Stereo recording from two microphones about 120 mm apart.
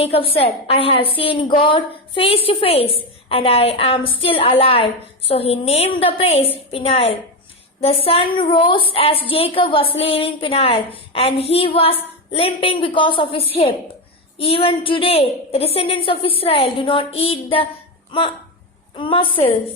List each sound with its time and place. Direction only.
0.0 s a woman's voice: 50° left (ahead or behind)
18.9 s a woman's voice: 45° left (ahead or behind)